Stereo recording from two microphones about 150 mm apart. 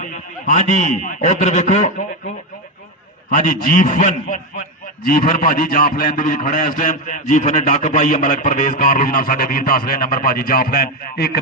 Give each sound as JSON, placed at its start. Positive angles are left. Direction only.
{"t": 0.0, "sound": "a man's voice", "side_deg": 60}
{"t": 3.2, "sound": "a man's voice", "side_deg": 60}